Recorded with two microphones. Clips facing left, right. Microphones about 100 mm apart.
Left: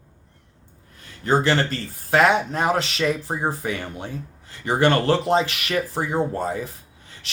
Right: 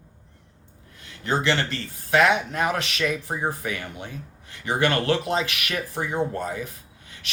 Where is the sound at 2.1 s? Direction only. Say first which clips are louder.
Left 2 dB; 30° left (ahead or behind).